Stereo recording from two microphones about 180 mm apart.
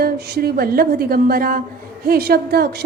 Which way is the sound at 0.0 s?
60° right (ahead or behind).